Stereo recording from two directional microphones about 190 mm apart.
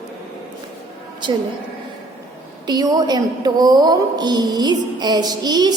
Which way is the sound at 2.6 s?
20° right (ahead or behind).